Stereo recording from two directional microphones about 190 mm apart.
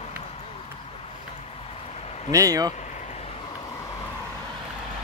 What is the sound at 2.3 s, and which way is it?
Speech, 20° right (ahead or behind).